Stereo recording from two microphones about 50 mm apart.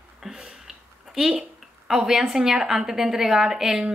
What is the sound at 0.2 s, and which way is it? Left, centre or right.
Speech, centre.